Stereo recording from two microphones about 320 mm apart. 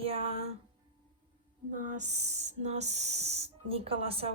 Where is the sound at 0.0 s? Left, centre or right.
Centre.